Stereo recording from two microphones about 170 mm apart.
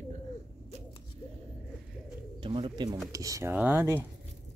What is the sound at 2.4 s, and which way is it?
Speech, 30° right (ahead or behind).